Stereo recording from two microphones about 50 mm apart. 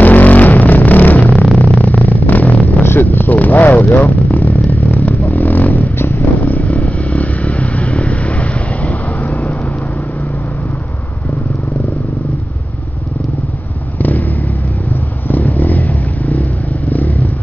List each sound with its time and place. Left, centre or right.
0.0 s vehicle: left
1.6 s a sound: left
2.8 s vehicle: left
5.9 s vehicle: left
6.4 s vehicle: left
13.9 s vehicle: left